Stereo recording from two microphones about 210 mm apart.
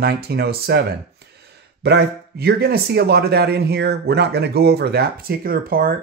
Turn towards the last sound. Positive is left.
turn(degrees=-45)  # may be behind; listen again after turning